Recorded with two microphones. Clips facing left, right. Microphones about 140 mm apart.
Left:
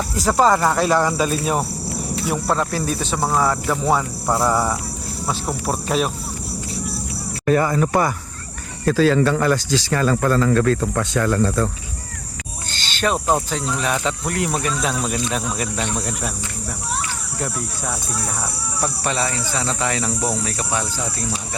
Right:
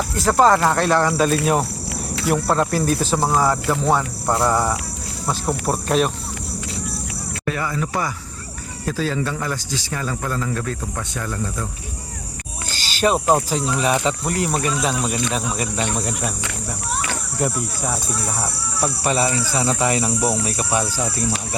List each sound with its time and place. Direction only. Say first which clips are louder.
0.2 s speech: right 1 dB; centre (ahead or behind)
7.4 s speech: left 7 dB; 40° left (ahead or behind)
8.8 s speech: left 7 dB; 75° left (ahead or behind)
12.8 s speech: right 3 dB; 5° right (ahead or behind)
17.4 s speech: right 3 dB; centre (ahead or behind)